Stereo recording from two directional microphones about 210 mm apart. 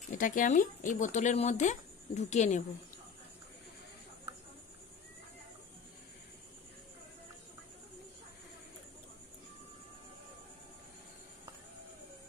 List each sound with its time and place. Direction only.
0.1 s speech: 40° left (ahead or behind)